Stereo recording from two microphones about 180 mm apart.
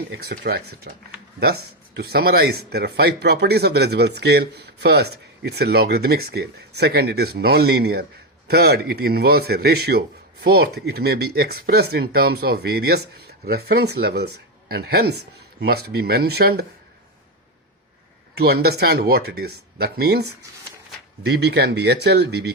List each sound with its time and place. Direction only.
0.1 s speech: 60° right (ahead or behind)
18.3 s speech: 60° right (ahead or behind)